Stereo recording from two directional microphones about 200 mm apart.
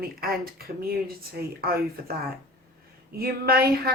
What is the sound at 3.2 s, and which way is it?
Speech, 50° right (ahead or behind).